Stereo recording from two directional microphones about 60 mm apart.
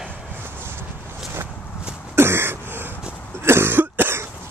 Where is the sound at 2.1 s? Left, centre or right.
Right.